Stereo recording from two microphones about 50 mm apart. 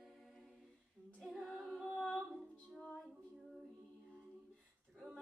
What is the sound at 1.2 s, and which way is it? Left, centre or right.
Female singing, centre.